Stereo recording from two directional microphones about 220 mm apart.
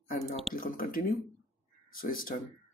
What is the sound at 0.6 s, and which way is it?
A man's voice, 40° left (ahead or behind).